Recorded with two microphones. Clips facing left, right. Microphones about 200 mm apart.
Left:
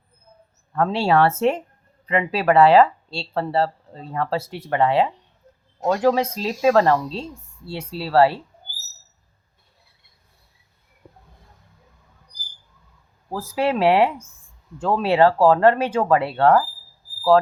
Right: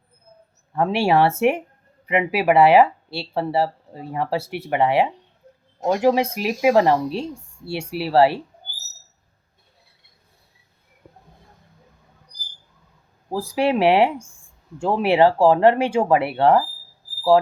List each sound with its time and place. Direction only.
0.7 s a woman's voice: 15° right (ahead or behind)
13.5 s a woman's voice: 15° right (ahead or behind)